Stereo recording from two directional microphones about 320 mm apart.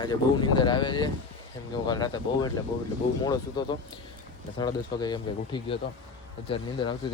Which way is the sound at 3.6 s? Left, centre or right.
Centre.